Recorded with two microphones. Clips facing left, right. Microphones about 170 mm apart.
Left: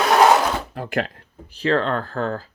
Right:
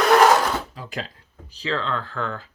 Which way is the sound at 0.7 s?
60° left (ahead or behind).